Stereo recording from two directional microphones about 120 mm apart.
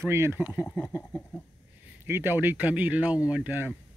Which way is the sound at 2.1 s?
15° right (ahead or behind).